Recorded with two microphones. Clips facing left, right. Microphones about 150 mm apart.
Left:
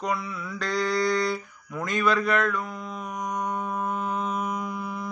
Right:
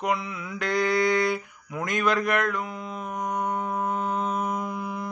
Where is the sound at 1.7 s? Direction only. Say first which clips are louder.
Even; 15° right (ahead or behind).